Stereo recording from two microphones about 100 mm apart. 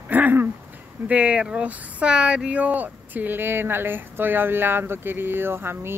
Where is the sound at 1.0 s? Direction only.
10° right (ahead or behind).